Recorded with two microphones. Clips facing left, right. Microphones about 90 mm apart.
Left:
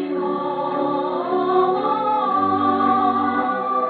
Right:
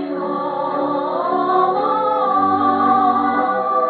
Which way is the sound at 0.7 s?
20° right (ahead or behind).